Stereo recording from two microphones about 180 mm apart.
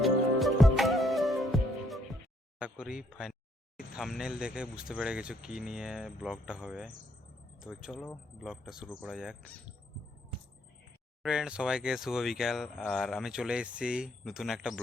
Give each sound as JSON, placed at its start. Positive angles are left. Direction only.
{"t": 0.0, "sound": "music", "side_deg": 0}
{"t": 2.6, "sound": "speech", "side_deg": -5}
{"t": 11.2, "sound": "speech", "side_deg": -5}